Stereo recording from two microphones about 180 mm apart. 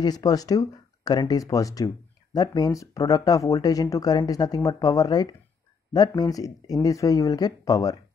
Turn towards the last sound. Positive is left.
turn(degrees=20)  # may be behind; listen again after turning